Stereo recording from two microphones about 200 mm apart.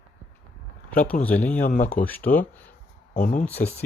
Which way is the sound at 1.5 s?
40° left (ahead or behind).